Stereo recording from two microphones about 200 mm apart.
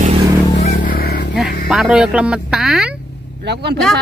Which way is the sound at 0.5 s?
35° left (ahead or behind).